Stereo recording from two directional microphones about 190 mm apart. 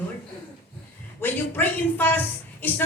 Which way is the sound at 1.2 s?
10° left (ahead or behind).